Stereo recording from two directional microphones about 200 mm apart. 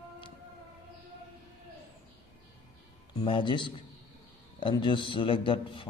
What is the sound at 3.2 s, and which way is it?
A man's voice, 25° left (ahead or behind).